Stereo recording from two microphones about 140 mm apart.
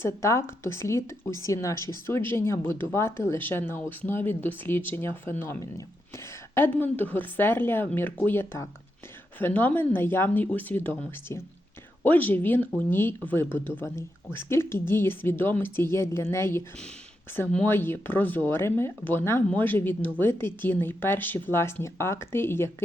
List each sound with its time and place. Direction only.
0.0 s a woman's voice: 20° left (ahead or behind)